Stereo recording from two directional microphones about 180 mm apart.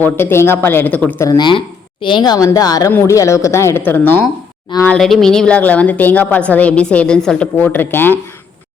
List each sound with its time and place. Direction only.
0.0 s a woman's voice: 10° left (ahead or behind)
1.3 s a woman's voice: 25° left (ahead or behind)